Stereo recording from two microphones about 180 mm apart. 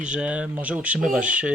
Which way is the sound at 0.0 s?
5° right (ahead or behind).